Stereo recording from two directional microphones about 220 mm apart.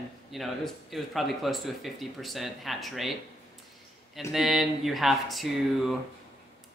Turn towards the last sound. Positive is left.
turn(degrees=0)  # may be behind; listen again after turning